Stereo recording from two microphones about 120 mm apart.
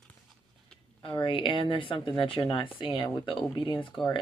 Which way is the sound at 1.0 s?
45° left (ahead or behind).